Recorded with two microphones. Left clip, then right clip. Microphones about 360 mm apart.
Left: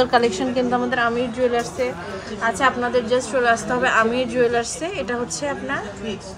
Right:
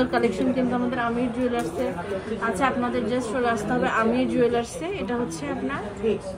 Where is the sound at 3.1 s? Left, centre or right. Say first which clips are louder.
Left 7 dB; left.